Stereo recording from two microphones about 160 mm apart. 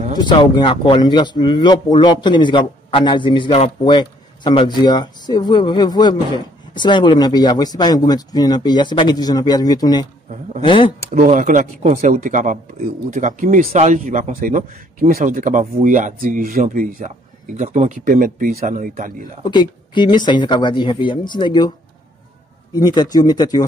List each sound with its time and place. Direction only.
0.2 s speech: 30° left (ahead or behind)
11.1 s a man's voice: 45° right (ahead or behind)
19.4 s speech: 30° left (ahead or behind)